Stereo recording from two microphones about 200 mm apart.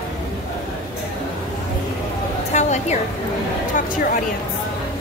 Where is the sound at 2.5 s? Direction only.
35° left (ahead or behind).